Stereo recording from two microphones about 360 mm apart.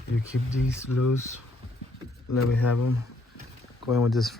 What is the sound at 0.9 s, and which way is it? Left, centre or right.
Speech, left.